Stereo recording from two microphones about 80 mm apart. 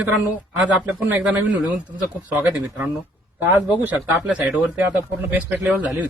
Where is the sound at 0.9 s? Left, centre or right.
Centre.